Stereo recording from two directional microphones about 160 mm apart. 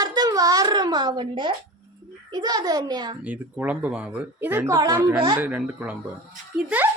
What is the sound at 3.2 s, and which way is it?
A woman's voice, 10° right (ahead or behind).